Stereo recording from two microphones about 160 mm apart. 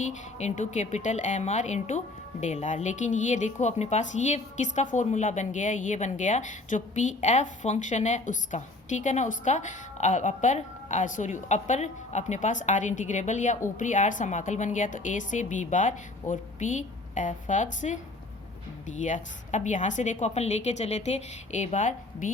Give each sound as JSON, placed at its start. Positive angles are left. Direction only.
{"t": 0.0, "sound": "a woman's voice", "side_deg": 50}